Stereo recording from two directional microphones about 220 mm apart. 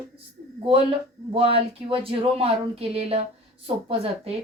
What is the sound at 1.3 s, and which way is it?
Speech, 25° right (ahead or behind).